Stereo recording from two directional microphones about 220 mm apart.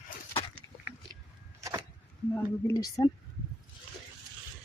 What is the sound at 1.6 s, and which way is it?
Vehicle, 15° right (ahead or behind).